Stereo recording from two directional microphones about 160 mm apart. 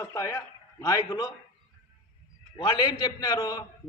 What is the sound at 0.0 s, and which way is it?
A man's voice, 15° left (ahead or behind).